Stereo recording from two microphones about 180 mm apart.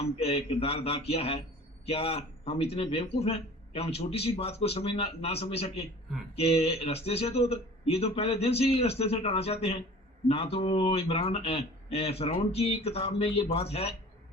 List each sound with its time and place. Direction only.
0.0 s speech: 35° left (ahead or behind)